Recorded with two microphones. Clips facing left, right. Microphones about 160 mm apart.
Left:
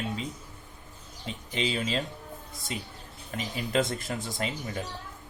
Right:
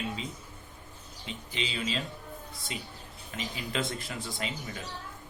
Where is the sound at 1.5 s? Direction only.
45° left (ahead or behind).